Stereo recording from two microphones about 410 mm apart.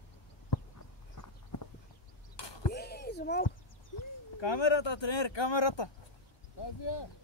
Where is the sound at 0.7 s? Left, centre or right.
Left.